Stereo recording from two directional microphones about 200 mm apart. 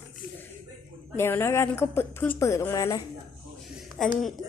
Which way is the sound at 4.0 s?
Centre (ahead or behind).